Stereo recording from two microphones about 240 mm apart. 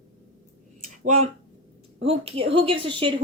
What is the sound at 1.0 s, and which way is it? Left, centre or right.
Speech, right.